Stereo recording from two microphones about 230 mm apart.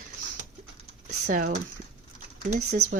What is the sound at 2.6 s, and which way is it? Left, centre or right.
Speech, right.